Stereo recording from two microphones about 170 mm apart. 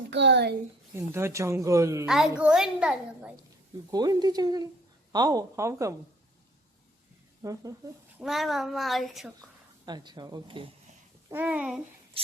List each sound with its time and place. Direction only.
0.1 s a child's voice: 90° right
0.9 s speech: 15° right (ahead or behind)
2.0 s speech: centre (ahead or behind)
3.9 s speech: 25° right (ahead or behind)
7.4 s speech: 20° right (ahead or behind)
8.2 s speech: centre (ahead or behind)
9.8 s speech: 25° right (ahead or behind)
11.3 s speech: 10° right (ahead or behind)